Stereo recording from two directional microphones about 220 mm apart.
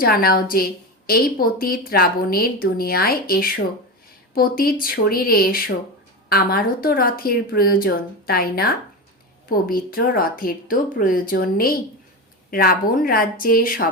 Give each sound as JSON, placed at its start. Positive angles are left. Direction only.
{"t": 0.0, "sound": "a woman's voice", "side_deg": 40}